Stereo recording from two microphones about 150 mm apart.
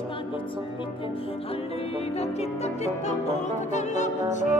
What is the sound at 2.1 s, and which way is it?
Music, 45° left (ahead or behind).